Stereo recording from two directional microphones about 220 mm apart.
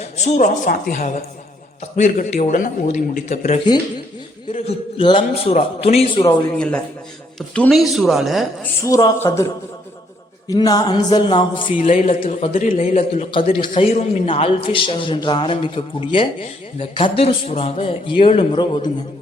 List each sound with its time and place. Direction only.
0.2 s a man's voice: 30° left (ahead or behind)
6.6 s a woman's voice: 5° left (ahead or behind)
8.8 s speech: 15° left (ahead or behind)
10.5 s a man's voice: 15° left (ahead or behind)
11.8 s a man's voice: 30° left (ahead or behind)